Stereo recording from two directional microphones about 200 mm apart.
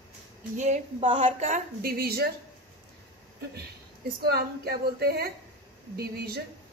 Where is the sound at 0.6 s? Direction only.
35° right (ahead or behind).